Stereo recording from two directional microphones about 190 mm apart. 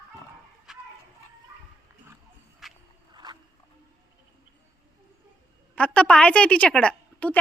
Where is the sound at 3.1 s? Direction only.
25° right (ahead or behind).